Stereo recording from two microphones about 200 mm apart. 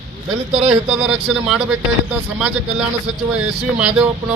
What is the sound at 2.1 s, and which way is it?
Speech, 5° right (ahead or behind).